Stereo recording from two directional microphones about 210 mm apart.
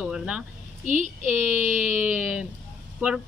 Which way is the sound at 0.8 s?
35° right (ahead or behind).